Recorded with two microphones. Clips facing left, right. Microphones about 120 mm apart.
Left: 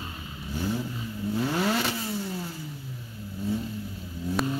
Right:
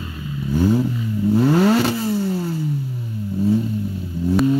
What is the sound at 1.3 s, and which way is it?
Vehicle, 65° right (ahead or behind).